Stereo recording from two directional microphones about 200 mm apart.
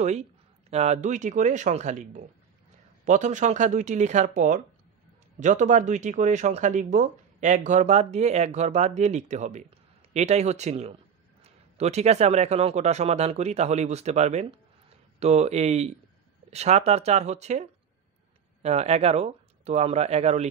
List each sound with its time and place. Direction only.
0.0 s speech: 35° right (ahead or behind)